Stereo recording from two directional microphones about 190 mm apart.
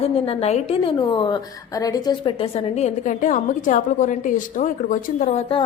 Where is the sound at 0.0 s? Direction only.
35° left (ahead or behind).